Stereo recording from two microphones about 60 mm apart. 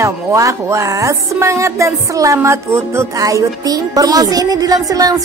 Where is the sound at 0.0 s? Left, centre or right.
Right.